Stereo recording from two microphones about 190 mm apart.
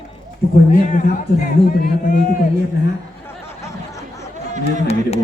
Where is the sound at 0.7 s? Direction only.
40° left (ahead or behind).